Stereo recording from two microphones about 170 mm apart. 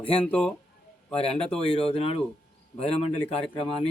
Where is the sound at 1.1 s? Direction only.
35° left (ahead or behind).